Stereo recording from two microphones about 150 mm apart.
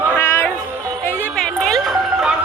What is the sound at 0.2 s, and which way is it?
Music, 15° left (ahead or behind).